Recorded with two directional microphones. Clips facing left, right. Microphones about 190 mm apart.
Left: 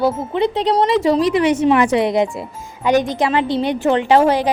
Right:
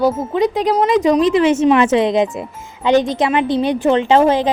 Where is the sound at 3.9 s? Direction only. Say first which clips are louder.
Even; 20° right (ahead or behind).